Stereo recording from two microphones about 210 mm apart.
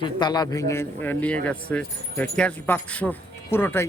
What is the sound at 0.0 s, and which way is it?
A man's voice, 20° left (ahead or behind).